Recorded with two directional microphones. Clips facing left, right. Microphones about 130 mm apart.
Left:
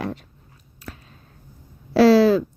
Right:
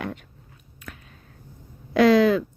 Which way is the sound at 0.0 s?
35° left (ahead or behind).